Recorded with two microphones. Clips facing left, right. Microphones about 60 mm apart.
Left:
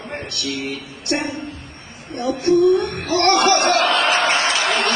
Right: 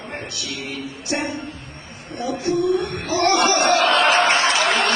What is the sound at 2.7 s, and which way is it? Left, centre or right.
Speech, centre.